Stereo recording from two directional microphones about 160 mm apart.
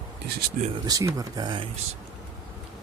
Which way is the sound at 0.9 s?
20° right (ahead or behind).